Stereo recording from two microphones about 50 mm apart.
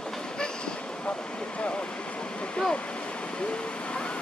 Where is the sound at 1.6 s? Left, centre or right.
Centre.